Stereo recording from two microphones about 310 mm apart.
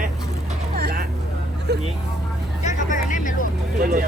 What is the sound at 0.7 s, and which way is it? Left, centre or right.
Vehicle, right.